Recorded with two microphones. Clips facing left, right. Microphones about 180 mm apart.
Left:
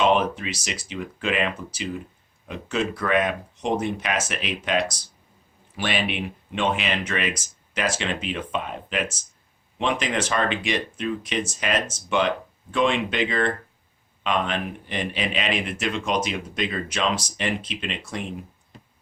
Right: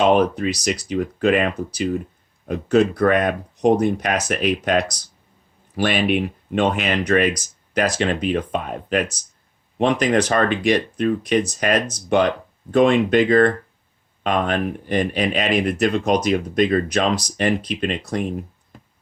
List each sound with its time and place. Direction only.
0.0 s speech: 40° right (ahead or behind)